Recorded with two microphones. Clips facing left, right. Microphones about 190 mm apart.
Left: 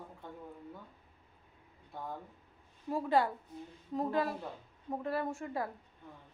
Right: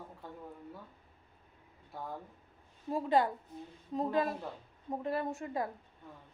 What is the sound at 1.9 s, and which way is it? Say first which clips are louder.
Speech: even; centre (ahead or behind).